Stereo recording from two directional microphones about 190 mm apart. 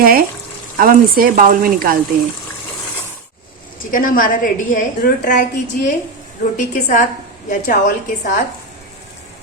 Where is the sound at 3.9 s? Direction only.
45° left (ahead or behind).